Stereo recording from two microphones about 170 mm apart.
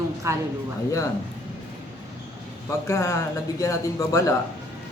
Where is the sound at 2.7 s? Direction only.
15° left (ahead or behind).